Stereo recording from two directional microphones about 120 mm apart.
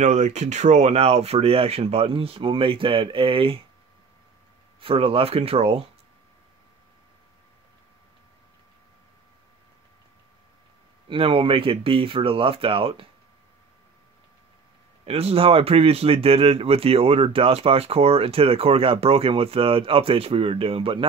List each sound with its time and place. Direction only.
0.0 s speech: 80° right; by 3.6 s 50° right (ahead or behind)
4.7 s speech: 50° right (ahead or behind)
11.1 s speech: 50° right (ahead or behind)
15.0 s speech: 55° right (ahead or behind)